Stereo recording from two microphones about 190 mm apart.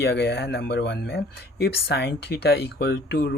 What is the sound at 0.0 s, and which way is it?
Speech, 60° left (ahead or behind).